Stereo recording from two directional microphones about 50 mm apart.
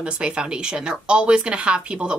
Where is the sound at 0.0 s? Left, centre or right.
Right.